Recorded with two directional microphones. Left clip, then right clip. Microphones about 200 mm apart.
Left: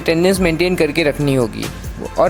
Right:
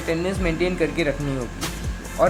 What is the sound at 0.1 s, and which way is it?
Speech, 40° left (ahead or behind).